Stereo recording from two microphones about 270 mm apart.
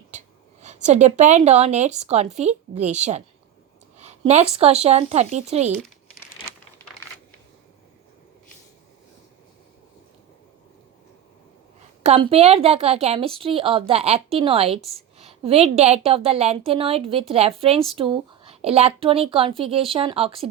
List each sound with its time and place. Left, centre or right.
0.1 s a sound: right
0.6 s a woman's voice: right
12.0 s a woman's voice: right